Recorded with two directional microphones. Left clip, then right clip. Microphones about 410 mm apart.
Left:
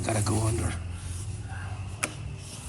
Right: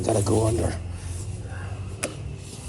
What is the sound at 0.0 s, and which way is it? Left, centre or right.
Speech, centre.